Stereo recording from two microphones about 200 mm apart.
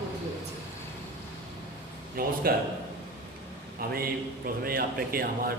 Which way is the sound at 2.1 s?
50° right (ahead or behind).